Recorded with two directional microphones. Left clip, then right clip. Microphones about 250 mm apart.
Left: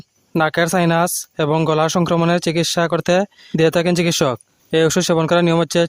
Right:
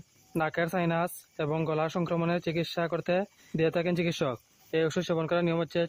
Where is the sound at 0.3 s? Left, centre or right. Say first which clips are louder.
Left 13 dB; left.